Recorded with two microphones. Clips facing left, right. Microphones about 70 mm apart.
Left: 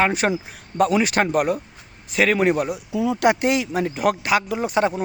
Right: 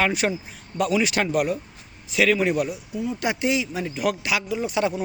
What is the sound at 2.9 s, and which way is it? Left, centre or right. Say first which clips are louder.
Speech: left 6 dB; left.